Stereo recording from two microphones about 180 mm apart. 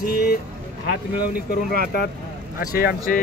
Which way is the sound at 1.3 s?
50° left (ahead or behind).